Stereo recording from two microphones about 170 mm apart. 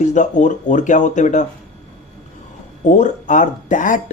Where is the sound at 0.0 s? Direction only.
45° left (ahead or behind).